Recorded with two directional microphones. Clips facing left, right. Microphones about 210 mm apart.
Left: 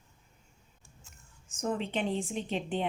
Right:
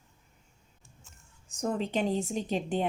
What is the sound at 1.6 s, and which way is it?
Speech, 40° right (ahead or behind).